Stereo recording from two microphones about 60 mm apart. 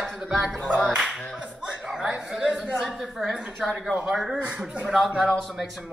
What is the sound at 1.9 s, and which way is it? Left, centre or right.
Speech, centre.